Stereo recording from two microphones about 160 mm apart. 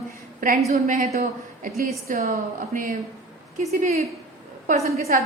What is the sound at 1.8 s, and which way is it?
A woman's voice, 65° right (ahead or behind).